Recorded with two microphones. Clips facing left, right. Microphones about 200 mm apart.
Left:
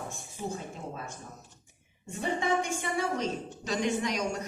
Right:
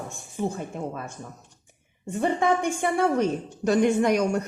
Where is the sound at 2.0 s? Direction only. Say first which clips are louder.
Right 7 dB; 60° right (ahead or behind).